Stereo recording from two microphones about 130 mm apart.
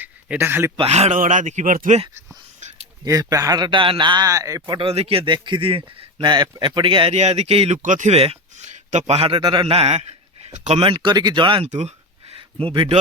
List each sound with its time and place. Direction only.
0.0 s a sound: 15° right (ahead or behind)
0.8 s speech: 55° right (ahead or behind); by 2.0 s 90° right
3.0 s a man's voice: 30° right (ahead or behind)
4.9 s a man's voice: 50° right (ahead or behind)
7.8 s speech: 75° right (ahead or behind)
8.1 s a man's voice: 50° right (ahead or behind)
9.4 s a man's voice: 35° right (ahead or behind)
11.7 s speech: 60° right (ahead or behind)
12.4 s speech: 45° right (ahead or behind)